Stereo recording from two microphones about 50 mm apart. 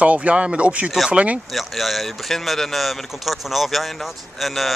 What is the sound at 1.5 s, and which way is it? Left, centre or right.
Speech, centre.